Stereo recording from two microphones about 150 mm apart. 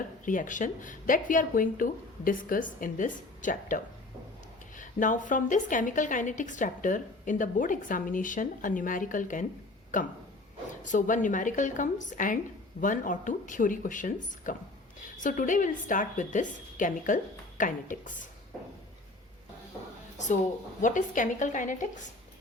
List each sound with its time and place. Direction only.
0.3 s a woman's voice: 60° left (ahead or behind)
4.8 s a woman's voice: 60° left (ahead or behind)
10.8 s a woman's voice: 60° left (ahead or behind)
20.8 s a woman's voice: 60° left (ahead or behind)